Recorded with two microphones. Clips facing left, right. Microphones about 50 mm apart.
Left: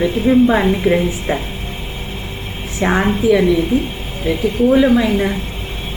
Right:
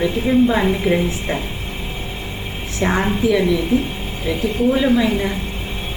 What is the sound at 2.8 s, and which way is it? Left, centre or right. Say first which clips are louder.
Speech: left 3 dB; centre.